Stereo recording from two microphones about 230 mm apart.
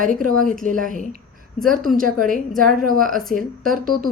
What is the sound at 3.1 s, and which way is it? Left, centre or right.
Speech, centre.